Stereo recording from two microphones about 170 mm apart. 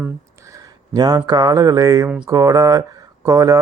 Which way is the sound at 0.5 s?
25° right (ahead or behind).